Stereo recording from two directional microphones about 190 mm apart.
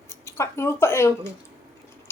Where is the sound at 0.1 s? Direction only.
15° left (ahead or behind).